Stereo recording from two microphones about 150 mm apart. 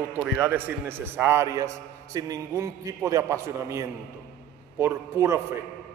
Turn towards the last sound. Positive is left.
turn(degrees=-20)  # may be behind; listen again after turning